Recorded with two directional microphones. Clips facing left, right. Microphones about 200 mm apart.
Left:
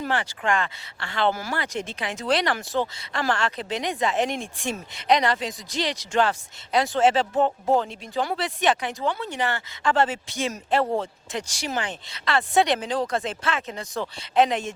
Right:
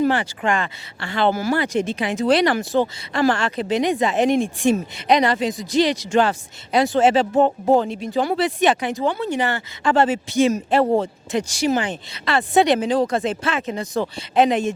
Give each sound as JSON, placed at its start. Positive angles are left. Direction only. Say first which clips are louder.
{"t": 0.0, "sound": "speech", "louder": "right 7 dB", "side_deg": -10}
{"t": 7.4, "sound": "speech", "louder": "right 5 dB", "side_deg": -35}
{"t": 7.8, "sound": "speech", "louder": "right 6 dB", "side_deg": -5}